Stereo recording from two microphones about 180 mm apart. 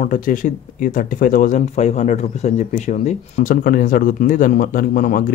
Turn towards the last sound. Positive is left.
turn(degrees=45)  # may be behind; listen again after turning